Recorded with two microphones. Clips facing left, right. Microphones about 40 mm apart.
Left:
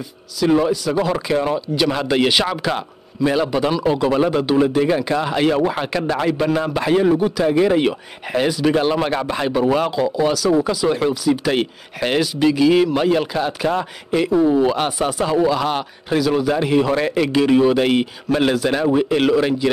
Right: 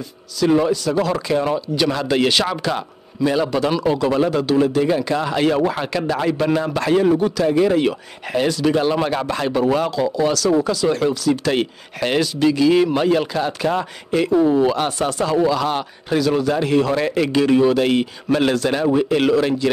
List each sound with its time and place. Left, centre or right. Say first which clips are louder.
0.4 s speech: even; centre
1.0 s speech: even; centre